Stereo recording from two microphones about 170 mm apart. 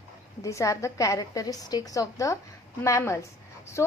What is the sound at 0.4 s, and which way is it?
A woman's voice, 20° left (ahead or behind).